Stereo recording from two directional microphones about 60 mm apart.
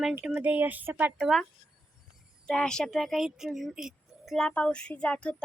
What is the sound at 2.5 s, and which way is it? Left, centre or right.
Speech, centre.